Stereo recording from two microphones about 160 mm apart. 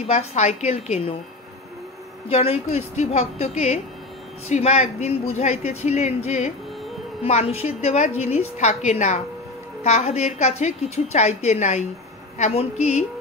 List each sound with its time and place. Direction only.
0.0 s speech: 40° left (ahead or behind)
2.2 s a woman's voice: 35° left (ahead or behind)